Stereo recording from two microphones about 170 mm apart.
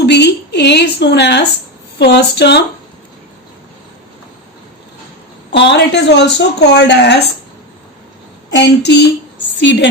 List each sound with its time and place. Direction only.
0.0 s a sound: 80° left
2.0 s speech: 85° left
5.5 s a woman's voice: 90° left
8.5 s a woman's voice: 85° left